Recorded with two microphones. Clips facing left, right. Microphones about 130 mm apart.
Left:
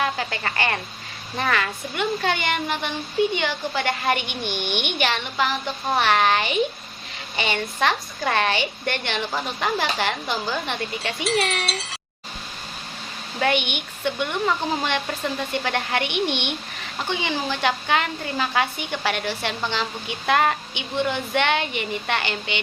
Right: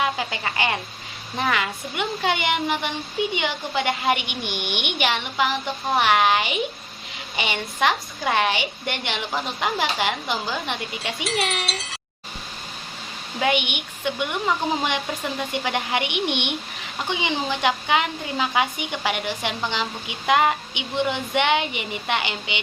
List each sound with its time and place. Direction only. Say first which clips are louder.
0.0 s speech: even; 15° right (ahead or behind)
11.2 s speech: left 3 dB; centre (ahead or behind)
13.4 s speech: even; 10° right (ahead or behind)